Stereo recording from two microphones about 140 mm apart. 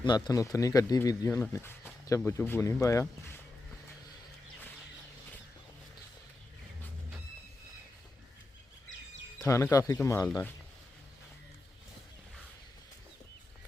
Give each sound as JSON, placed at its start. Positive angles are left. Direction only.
{"t": 0.0, "sound": "speech", "side_deg": 30}
{"t": 9.4, "sound": "speech", "side_deg": 20}